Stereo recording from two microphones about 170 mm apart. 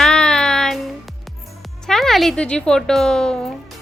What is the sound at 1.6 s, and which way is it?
Speech, centre (ahead or behind).